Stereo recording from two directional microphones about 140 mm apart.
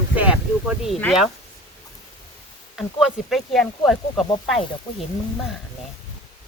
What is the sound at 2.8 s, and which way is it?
Speech, centre (ahead or behind).